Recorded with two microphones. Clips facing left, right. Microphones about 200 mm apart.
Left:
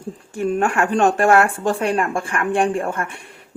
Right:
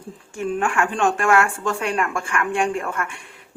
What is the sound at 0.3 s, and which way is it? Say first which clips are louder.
Speech: left 3 dB; 40° left (ahead or behind).